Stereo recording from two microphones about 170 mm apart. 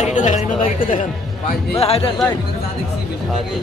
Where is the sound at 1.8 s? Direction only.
35° left (ahead or behind).